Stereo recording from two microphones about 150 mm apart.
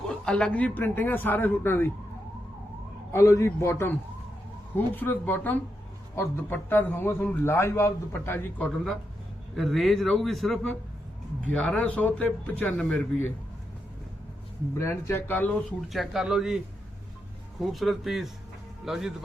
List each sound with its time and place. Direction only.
0.1 s a man's voice: 5° left (ahead or behind)
3.1 s a man's voice: 20° left (ahead or behind)
4.9 s a man's voice: 15° left (ahead or behind)
9.6 s a man's voice: centre (ahead or behind)
14.8 s a man's voice: 20° left (ahead or behind)
15.9 s a man's voice: centre (ahead or behind)
17.6 s a man's voice: centre (ahead or behind)